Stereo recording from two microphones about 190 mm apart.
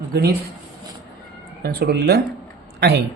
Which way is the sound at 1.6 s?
55° right (ahead or behind).